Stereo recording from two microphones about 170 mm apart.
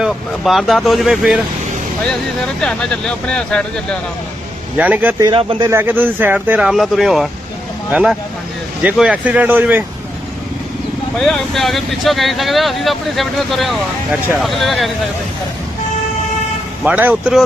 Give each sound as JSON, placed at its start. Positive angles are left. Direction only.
{"t": 0.0, "sound": "speech", "side_deg": 0}
{"t": 2.6, "sound": "speech", "side_deg": 5}
{"t": 4.8, "sound": "speech", "side_deg": -10}
{"t": 5.3, "sound": "speech", "side_deg": -30}
{"t": 5.6, "sound": "speech", "side_deg": -15}
{"t": 11.2, "sound": "speech", "side_deg": 0}
{"t": 16.8, "sound": "speech", "side_deg": -10}